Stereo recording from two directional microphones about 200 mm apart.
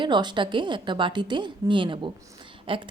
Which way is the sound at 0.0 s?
25° right (ahead or behind).